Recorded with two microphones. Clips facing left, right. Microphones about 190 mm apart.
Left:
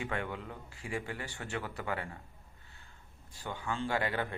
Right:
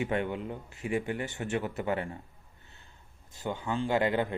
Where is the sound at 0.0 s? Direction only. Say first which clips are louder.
Right 7 dB; 20° right (ahead or behind).